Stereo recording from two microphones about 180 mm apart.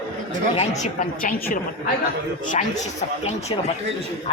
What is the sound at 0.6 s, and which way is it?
A woman's voice, 40° left (ahead or behind).